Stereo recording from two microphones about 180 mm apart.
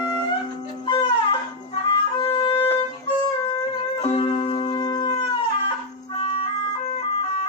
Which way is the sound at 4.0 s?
35° left (ahead or behind).